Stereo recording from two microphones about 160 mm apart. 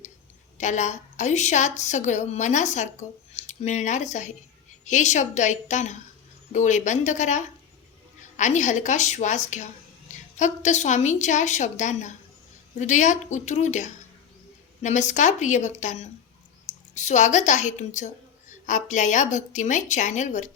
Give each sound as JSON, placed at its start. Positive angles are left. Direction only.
{"t": 0.6, "sound": "a woman's voice", "side_deg": 50}